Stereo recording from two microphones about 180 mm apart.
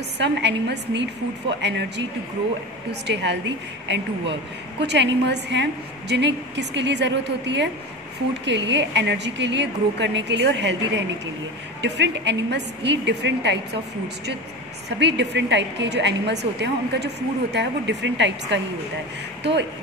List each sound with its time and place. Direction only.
0.2 s a woman's voice: 75° right (ahead or behind)
4.7 s a woman's voice: 75° right (ahead or behind)
15.0 s a woman's voice: 75° right (ahead or behind)